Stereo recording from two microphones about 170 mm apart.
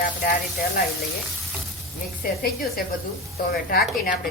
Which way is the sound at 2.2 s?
60° left (ahead or behind).